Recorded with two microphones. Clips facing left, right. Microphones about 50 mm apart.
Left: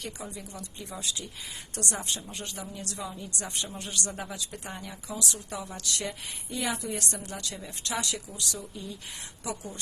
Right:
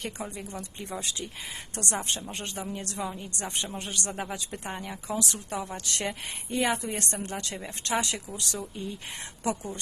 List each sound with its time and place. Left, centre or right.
0.0 s a woman's voice: right